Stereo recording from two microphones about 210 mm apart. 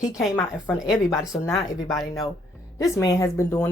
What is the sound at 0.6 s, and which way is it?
A woman's voice, centre (ahead or behind).